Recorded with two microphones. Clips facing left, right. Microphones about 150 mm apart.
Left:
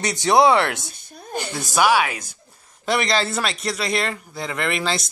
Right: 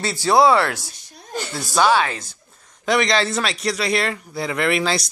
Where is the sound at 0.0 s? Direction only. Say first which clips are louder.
Even; 20° left (ahead or behind).